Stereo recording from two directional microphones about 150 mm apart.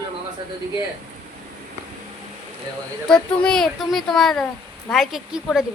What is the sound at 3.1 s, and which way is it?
Speech, 5° left (ahead or behind).